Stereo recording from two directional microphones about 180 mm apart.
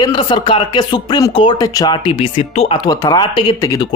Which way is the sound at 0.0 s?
25° left (ahead or behind).